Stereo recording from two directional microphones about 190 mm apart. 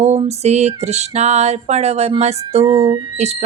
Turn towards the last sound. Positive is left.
turn(degrees=-35)  # may be behind; listen again after turning